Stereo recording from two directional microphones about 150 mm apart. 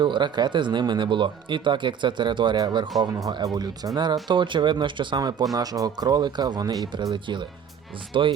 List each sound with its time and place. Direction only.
0.0 s speech: 30° right (ahead or behind)